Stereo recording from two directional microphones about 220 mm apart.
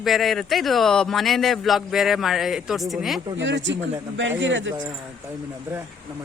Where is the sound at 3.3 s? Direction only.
55° right (ahead or behind).